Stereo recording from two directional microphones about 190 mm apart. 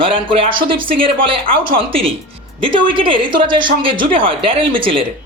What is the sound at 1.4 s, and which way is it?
Speech, 50° right (ahead or behind).